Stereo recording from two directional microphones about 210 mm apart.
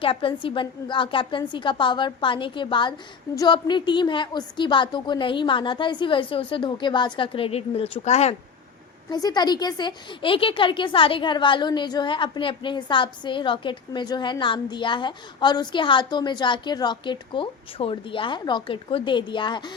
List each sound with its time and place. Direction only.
0.0 s a woman's voice: 25° left (ahead or behind)
9.0 s a woman's voice: 20° left (ahead or behind)